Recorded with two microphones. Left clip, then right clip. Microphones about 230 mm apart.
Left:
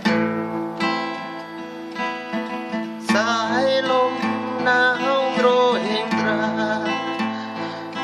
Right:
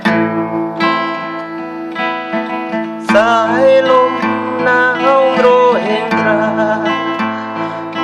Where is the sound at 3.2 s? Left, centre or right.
Centre.